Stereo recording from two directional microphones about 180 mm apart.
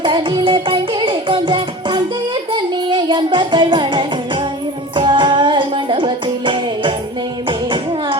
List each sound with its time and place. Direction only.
0.0 s music: 25° right (ahead or behind)